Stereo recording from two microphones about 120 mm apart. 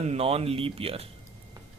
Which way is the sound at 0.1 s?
55° right (ahead or behind).